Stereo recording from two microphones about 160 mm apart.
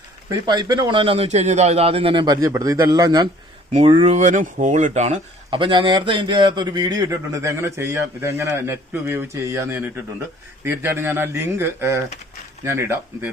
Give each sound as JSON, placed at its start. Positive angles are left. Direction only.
{"t": 0.3, "sound": "speech", "side_deg": -25}
{"t": 3.7, "sound": "speech", "side_deg": -40}